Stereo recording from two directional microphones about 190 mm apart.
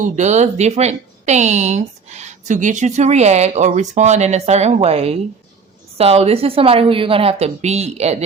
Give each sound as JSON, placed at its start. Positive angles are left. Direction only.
{"t": 0.0, "sound": "a woman's voice", "side_deg": -35}